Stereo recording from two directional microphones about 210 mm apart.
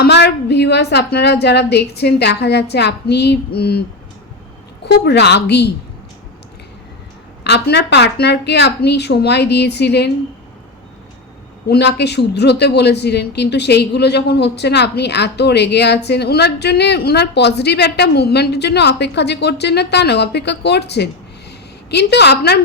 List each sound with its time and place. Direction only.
0.0 s speech: 50° left (ahead or behind)
4.9 s speech: 55° left (ahead or behind)
7.4 s speech: 50° left (ahead or behind)
11.7 s speech: 55° left (ahead or behind)